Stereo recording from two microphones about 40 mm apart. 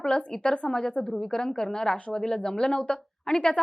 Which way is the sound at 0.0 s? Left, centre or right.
Left.